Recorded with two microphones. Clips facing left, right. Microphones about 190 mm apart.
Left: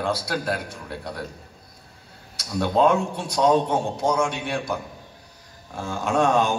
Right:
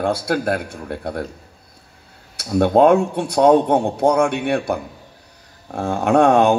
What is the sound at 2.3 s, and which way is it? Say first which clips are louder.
A man's voice: right 7 dB; 55° right (ahead or behind).